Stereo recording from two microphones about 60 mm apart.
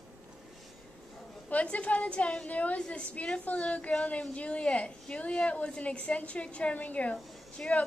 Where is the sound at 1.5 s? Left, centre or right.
Left.